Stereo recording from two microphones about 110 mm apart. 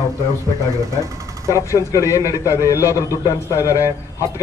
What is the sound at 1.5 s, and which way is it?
A man's voice, 30° left (ahead or behind).